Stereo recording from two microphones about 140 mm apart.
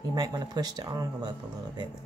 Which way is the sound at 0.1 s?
30° right (ahead or behind).